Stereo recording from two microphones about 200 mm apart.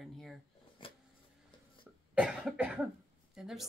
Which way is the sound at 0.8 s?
25° left (ahead or behind).